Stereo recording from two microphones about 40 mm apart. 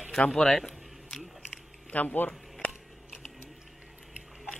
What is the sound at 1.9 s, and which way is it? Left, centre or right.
Speech, left.